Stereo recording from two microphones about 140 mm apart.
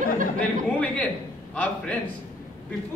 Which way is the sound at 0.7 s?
10° left (ahead or behind).